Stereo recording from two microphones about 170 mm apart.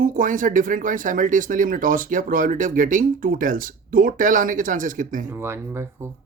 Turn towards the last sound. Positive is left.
turn(degrees=-15)  # may be behind; listen again after turning